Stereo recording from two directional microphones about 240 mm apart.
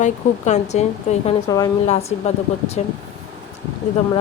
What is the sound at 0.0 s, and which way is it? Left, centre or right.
Speech, left.